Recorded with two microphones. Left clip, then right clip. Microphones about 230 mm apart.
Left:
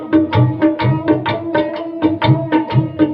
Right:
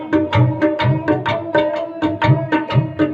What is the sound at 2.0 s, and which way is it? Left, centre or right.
Music, right.